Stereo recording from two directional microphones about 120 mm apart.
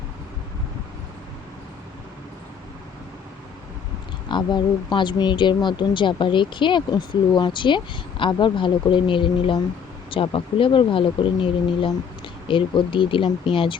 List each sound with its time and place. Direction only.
4.3 s speech: 40° left (ahead or behind)